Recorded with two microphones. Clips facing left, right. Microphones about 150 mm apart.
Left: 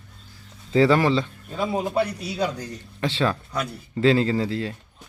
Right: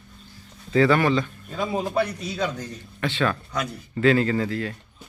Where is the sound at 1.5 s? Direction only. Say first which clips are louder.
Left 1 dB; 10° left (ahead or behind).